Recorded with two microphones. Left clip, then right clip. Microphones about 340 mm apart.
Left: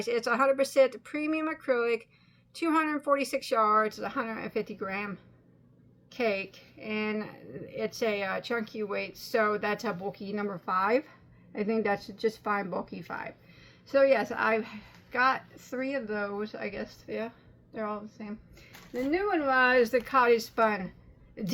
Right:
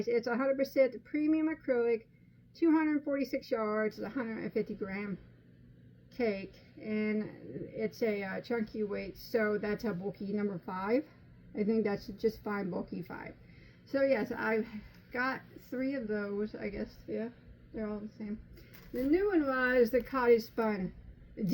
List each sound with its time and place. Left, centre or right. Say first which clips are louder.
0.0 s a woman's voice: left 5 dB; centre
6.1 s a woman's voice: left 5 dB; centre
19.5 s a woman's voice: left 9 dB; centre